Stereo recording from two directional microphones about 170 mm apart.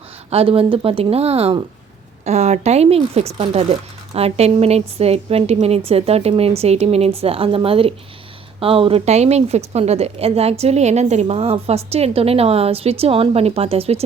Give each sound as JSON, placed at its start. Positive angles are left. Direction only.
{"t": 0.3, "sound": "a woman's voice", "side_deg": -35}